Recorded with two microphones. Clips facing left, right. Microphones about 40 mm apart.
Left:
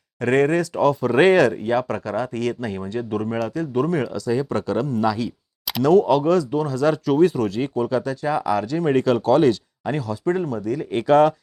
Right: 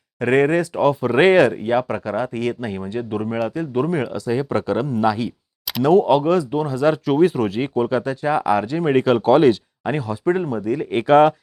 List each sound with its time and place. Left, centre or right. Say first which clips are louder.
0.2 s speech: right 2 dB; centre